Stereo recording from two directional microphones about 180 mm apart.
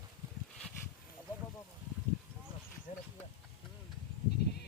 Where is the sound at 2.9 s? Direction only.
40° left (ahead or behind).